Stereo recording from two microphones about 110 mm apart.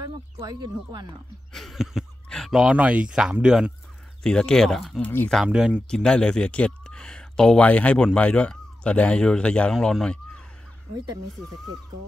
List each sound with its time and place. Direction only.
0.0 s speech: 35° right (ahead or behind)
1.5 s a sound: centre (ahead or behind)
2.2 s speech: 5° left (ahead or behind)
4.2 s speech: 5° left (ahead or behind)
5.0 s speech: 15° left (ahead or behind)
5.3 s speech: 5° right (ahead or behind)
5.9 s speech: 10° left (ahead or behind)